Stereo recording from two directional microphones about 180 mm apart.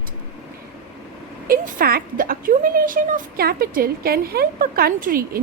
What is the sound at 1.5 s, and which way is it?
A woman's voice, 55° right (ahead or behind).